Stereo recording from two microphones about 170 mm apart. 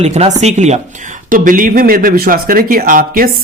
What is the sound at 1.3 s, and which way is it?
Speech, 55° right (ahead or behind).